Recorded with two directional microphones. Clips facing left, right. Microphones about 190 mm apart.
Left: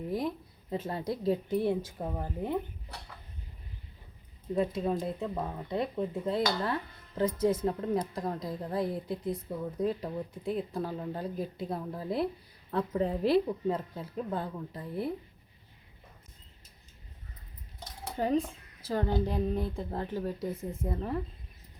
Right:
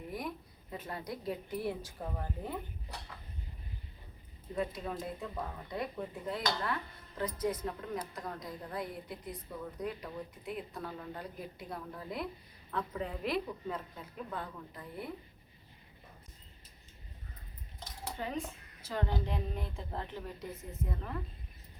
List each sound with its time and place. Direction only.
0.1 s speech: 30° left (ahead or behind)
4.5 s a woman's voice: 25° left (ahead or behind)
18.2 s a woman's voice: 40° left (ahead or behind)